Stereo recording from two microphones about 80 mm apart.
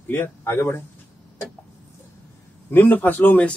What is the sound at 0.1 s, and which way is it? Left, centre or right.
Speech, left.